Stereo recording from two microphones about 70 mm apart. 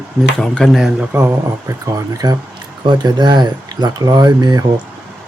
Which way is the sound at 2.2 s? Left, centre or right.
Right.